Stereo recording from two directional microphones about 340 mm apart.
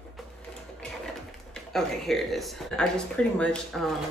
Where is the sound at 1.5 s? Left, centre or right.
Centre.